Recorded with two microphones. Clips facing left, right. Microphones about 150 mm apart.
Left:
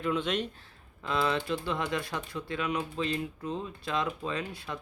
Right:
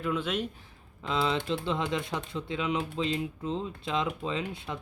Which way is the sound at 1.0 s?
20° right (ahead or behind).